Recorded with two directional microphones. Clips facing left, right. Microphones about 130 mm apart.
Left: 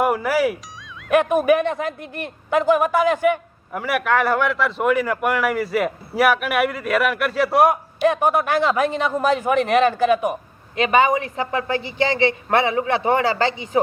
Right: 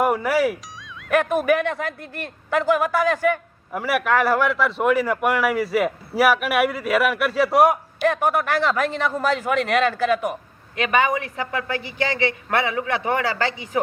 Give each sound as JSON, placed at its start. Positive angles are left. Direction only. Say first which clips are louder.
{"t": 0.0, "sound": "speech", "louder": "left 1 dB", "side_deg": 0}
{"t": 1.1, "sound": "speech", "louder": "left 3 dB", "side_deg": 15}
{"t": 3.7, "sound": "a man's voice", "louder": "even", "side_deg": 0}
{"t": 8.0, "sound": "a woman's voice", "louder": "left 2 dB", "side_deg": 15}